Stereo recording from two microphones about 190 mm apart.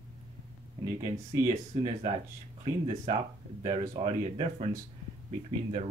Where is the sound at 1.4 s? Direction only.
30° right (ahead or behind).